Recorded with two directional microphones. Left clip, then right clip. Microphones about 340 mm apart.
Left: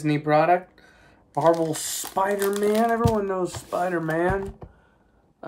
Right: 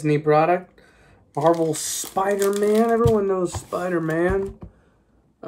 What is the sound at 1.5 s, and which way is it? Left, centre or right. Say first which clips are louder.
Speech: right 2 dB; centre.